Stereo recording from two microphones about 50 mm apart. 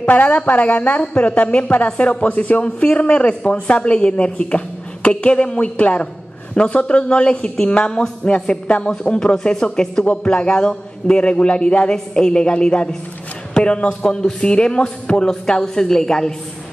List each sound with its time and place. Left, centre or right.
0.0 s a woman's voice: left; by 16.3 s centre